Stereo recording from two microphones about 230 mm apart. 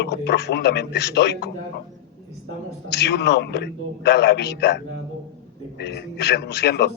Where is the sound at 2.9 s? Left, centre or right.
Left.